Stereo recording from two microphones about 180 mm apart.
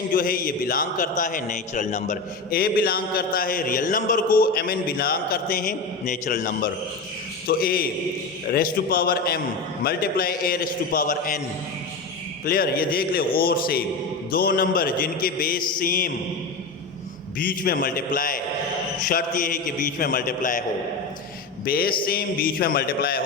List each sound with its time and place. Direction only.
0.2 s a man's voice: 55° left (ahead or behind)
6.3 s a man's voice: 60° left (ahead or behind)
12.5 s a man's voice: 55° left (ahead or behind)
17.3 s a man's voice: 50° left (ahead or behind)